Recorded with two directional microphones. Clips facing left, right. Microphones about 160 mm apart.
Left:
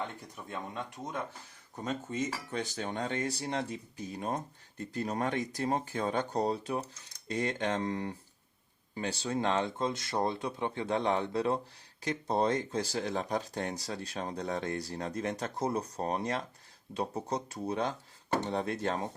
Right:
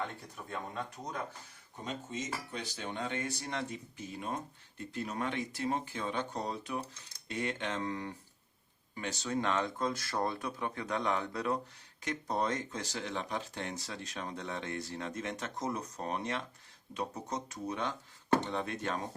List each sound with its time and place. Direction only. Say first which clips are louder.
1.8 s speech: left 5 dB; 50° left (ahead or behind); by 19.0 s 35° left (ahead or behind)